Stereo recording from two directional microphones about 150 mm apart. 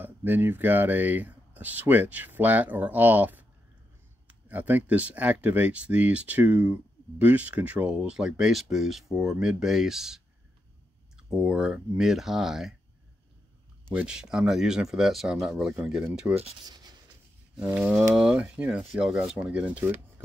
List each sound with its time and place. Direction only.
0.0 s speech: 15° right (ahead or behind)
13.9 s speech: 5° right (ahead or behind)
16.6 s writing: 25° right (ahead or behind)
17.6 s speech: 10° right (ahead or behind)